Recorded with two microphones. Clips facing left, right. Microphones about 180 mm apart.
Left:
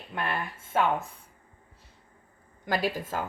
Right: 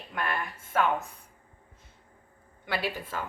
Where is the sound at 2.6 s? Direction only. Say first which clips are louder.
Left 4 dB; 40° left (ahead or behind).